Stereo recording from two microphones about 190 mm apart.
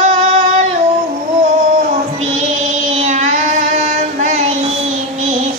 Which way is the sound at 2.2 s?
35° right (ahead or behind).